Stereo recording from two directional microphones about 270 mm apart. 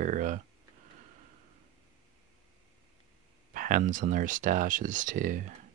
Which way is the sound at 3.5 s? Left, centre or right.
Right.